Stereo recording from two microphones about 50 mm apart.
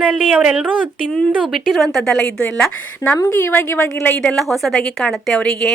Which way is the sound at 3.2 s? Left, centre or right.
Left.